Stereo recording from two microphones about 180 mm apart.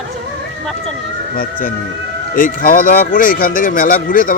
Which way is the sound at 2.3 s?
50° left (ahead or behind).